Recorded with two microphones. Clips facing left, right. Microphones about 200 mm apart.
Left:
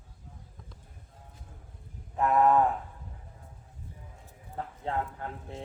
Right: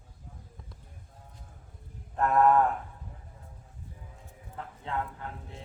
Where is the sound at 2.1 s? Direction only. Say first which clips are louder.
Even; 10° left (ahead or behind).